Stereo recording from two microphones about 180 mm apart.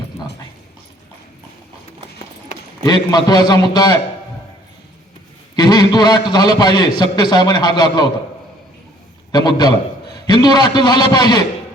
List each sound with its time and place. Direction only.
2.5 s a sound: 40° left (ahead or behind)
2.8 s a man's voice: 20° left (ahead or behind)
5.5 s a man's voice: 20° left (ahead or behind)
9.3 s a man's voice: 20° left (ahead or behind)